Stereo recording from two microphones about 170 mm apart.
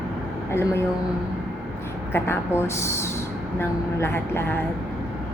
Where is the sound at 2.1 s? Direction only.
15° left (ahead or behind).